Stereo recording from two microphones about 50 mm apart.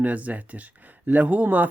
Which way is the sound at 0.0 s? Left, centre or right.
Right.